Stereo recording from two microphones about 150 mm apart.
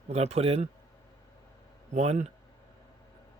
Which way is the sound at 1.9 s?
50° right (ahead or behind).